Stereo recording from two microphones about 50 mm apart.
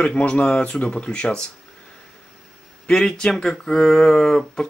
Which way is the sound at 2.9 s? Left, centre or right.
Centre.